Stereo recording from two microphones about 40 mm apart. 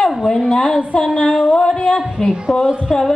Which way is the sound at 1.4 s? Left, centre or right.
Centre.